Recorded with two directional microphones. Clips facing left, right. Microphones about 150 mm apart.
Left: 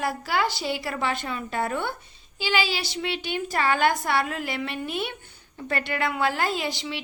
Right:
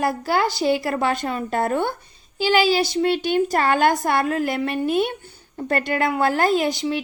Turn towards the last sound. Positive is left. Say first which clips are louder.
# right 9 dB
turn(degrees=-45)  # may be behind; listen again after turning